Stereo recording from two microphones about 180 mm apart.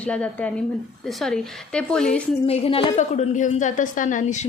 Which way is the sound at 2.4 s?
30° left (ahead or behind).